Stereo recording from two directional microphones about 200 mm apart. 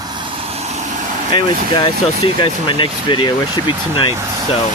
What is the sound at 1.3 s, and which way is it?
Speech, 20° left (ahead or behind).